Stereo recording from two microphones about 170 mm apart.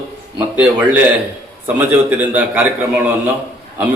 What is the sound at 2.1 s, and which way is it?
Speech, 10° right (ahead or behind).